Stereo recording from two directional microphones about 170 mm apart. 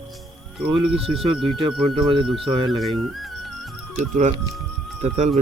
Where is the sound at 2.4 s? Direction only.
30° right (ahead or behind).